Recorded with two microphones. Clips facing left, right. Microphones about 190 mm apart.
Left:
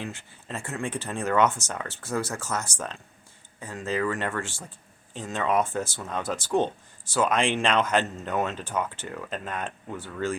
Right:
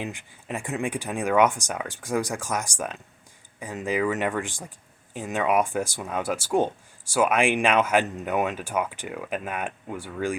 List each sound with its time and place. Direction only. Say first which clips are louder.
0.0 s speech: right 2 dB; 15° right (ahead or behind)